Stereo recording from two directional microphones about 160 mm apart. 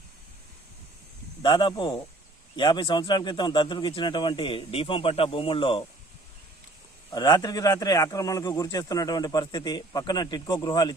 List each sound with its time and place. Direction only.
1.4 s speech: 30° left (ahead or behind)
7.1 s speech: 25° left (ahead or behind)